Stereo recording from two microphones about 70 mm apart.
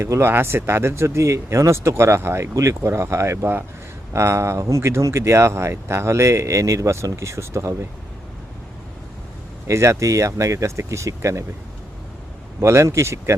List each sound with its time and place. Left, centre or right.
0.0 s speech: right
9.6 s speech: right
12.5 s speech: right